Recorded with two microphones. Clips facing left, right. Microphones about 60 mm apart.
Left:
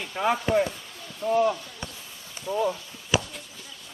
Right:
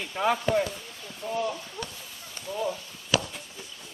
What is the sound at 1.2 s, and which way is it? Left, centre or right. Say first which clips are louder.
Speech: left 7 dB; left.